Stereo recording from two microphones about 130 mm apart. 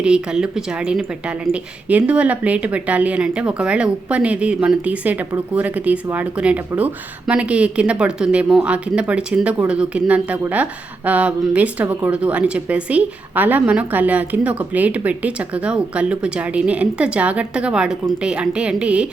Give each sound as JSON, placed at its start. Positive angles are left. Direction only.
{"t": 0.0, "sound": "a woman's voice", "side_deg": -5}